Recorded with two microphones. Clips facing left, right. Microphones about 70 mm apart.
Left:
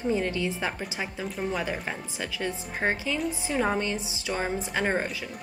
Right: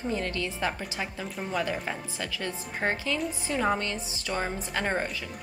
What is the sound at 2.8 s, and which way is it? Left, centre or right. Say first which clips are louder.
Speech: left 1 dB; centre.